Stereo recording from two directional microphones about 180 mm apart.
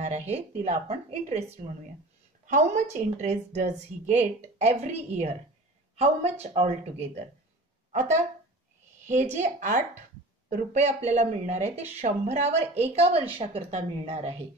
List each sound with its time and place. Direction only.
0.0 s speech: 35° right (ahead or behind)
9.0 s speech: 40° right (ahead or behind)